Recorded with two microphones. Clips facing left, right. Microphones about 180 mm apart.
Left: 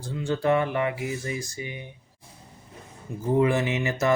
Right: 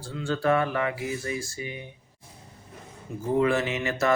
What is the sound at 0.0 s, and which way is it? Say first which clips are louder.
Mantra: left 1 dB; 20° left (ahead or behind).